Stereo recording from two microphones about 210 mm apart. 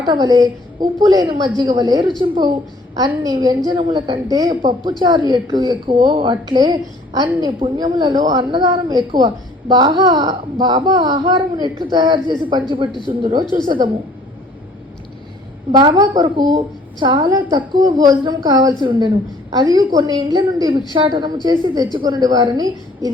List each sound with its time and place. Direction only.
0.0 s a woman's voice: 20° right (ahead or behind)
15.7 s a woman's voice: 20° right (ahead or behind)